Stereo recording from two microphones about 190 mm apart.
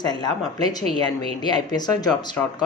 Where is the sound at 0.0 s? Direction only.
20° left (ahead or behind).